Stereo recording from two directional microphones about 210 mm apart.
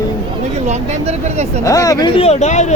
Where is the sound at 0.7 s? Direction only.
30° right (ahead or behind).